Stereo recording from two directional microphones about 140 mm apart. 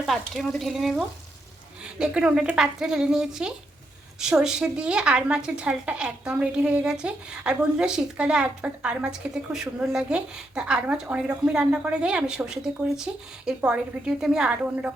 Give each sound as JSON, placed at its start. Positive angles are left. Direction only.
{"t": 0.0, "sound": "a woman's voice", "side_deg": 0}